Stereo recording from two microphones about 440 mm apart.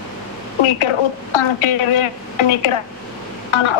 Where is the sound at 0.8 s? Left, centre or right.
Left.